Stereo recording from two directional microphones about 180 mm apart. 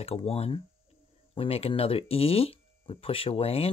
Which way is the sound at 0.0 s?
35° left (ahead or behind).